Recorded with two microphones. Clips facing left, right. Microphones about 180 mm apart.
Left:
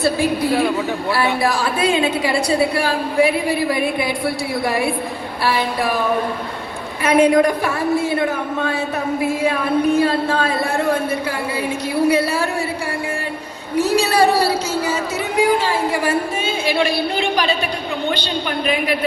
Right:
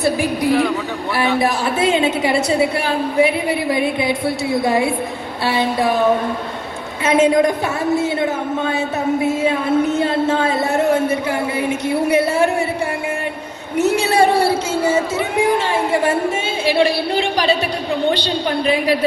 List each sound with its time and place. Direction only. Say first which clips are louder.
0.0 s a man's voice: even; 15° right (ahead or behind)
13.7 s a sound: right 1 dB; 25° right (ahead or behind)
16.6 s a woman's voice: right 4 dB; 30° right (ahead or behind)